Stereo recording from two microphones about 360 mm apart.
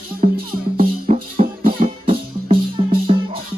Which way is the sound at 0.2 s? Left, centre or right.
Centre.